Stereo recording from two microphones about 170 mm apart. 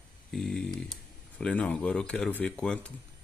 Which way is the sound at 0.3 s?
Centre (ahead or behind).